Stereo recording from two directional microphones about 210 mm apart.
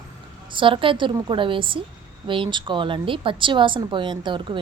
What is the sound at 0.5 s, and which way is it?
A woman's voice, 25° right (ahead or behind).